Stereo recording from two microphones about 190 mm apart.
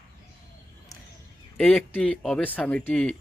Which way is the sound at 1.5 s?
5° left (ahead or behind).